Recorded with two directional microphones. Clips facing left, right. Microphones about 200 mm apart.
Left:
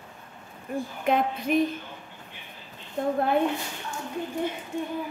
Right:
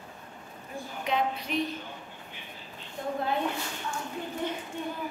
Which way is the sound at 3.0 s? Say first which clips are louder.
Left 8 dB; 55° left (ahead or behind).